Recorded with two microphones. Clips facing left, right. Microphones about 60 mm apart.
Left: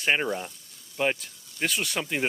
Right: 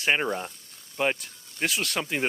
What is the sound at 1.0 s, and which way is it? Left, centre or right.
Speech, centre.